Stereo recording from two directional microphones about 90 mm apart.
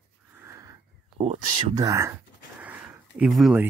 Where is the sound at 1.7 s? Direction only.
45° right (ahead or behind).